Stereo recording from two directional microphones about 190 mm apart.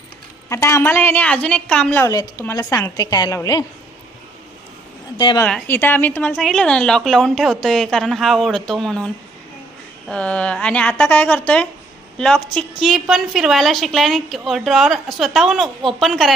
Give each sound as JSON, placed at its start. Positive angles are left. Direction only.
{"t": 0.4, "sound": "a woman's voice", "side_deg": 15}
{"t": 2.0, "sound": "a woman's voice", "side_deg": 15}
{"t": 5.1, "sound": "a woman's voice", "side_deg": 25}
{"t": 5.4, "sound": "a woman's voice", "side_deg": 10}